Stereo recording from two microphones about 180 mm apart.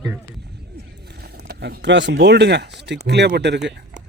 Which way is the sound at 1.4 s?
65° right (ahead or behind).